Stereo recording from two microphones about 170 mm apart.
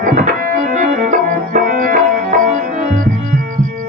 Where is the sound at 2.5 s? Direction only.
45° right (ahead or behind).